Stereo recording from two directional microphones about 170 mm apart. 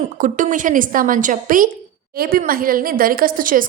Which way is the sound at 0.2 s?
50° right (ahead or behind).